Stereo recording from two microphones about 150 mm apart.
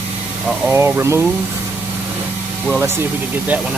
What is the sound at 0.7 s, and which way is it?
Speech, 15° right (ahead or behind).